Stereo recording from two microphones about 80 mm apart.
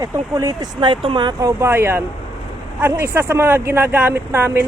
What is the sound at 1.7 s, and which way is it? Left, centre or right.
A man's voice, right.